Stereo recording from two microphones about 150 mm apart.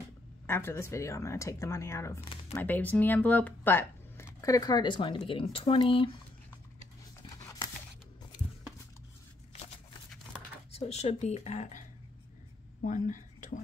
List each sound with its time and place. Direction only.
0.5 s speech: 15° left (ahead or behind); by 6.1 s 35° left (ahead or behind)
10.7 s speech: 45° left (ahead or behind)
12.8 s speech: 60° left (ahead or behind)